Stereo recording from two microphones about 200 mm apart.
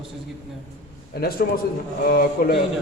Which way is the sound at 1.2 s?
50° left (ahead or behind).